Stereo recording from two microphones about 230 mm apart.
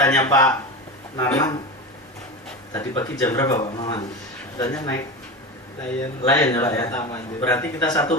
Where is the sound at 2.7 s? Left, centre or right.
Centre.